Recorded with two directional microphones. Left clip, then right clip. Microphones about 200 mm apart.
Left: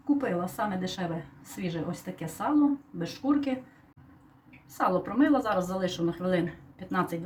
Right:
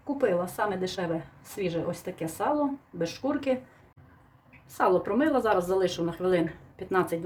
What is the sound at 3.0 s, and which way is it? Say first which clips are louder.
Speech: left 1 dB; 45° right (ahead or behind).